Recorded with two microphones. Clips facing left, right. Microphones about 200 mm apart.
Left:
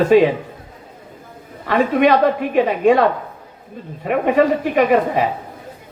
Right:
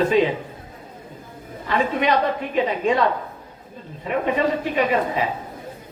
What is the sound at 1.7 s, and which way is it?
A woman's voice, 55° left (ahead or behind).